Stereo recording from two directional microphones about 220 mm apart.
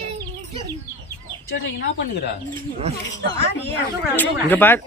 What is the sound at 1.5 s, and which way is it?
Speech, 60° left (ahead or behind).